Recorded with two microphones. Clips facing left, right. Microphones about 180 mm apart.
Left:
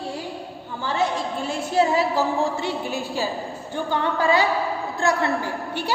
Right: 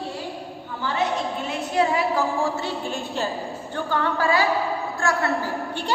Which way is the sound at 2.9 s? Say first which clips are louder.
Left 1 dB; 5° left (ahead or behind).